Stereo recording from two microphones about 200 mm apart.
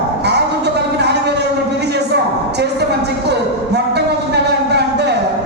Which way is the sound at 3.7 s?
55° right (ahead or behind).